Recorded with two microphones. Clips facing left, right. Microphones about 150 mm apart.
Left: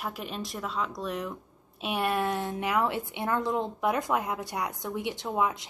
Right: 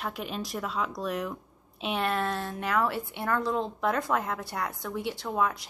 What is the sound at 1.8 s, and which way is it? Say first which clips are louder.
A woman's voice: left 1 dB; 10° left (ahead or behind).